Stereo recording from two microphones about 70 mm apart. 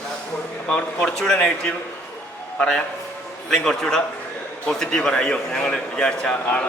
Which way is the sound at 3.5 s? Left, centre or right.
Centre.